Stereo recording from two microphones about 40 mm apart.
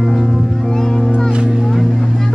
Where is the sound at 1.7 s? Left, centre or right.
Centre.